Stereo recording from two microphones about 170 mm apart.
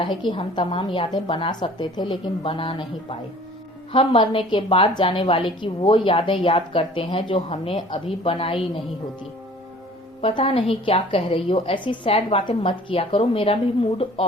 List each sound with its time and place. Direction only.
0.2 s a woman's voice: 30° left (ahead or behind)
10.2 s a woman's voice: 35° left (ahead or behind)